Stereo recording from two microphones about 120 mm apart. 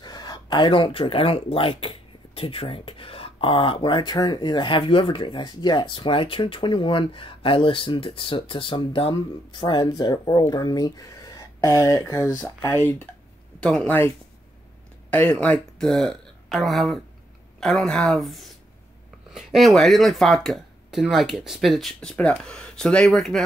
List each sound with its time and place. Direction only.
0.0 s speech: 35° left (ahead or behind); by 13.1 s 20° left (ahead or behind)
13.6 s speech: 5° left (ahead or behind)